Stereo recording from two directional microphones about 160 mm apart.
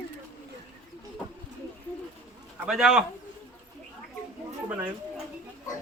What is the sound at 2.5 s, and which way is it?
Speech, 5° right (ahead or behind).